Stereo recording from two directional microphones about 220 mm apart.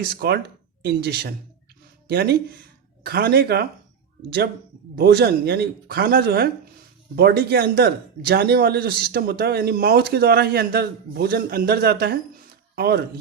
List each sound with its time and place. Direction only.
0.1 s speech: 45° right (ahead or behind)
4.9 s speech: 45° right (ahead or behind)